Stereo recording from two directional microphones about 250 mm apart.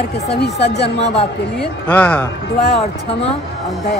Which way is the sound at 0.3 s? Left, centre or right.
Left.